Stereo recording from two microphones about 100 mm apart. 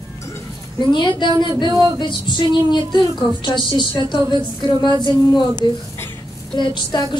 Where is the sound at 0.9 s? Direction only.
50° left (ahead or behind).